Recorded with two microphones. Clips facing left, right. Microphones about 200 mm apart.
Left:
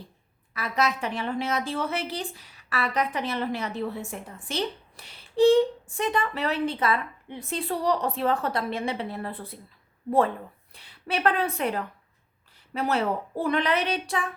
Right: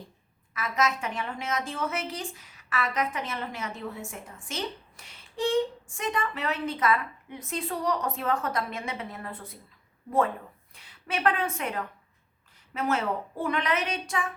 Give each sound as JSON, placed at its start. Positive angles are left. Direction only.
{"t": 0.5, "sound": "a woman's voice", "side_deg": 35}
{"t": 10.8, "sound": "a woman's voice", "side_deg": 35}